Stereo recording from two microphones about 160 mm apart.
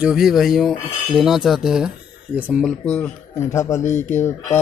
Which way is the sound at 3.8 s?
50° left (ahead or behind).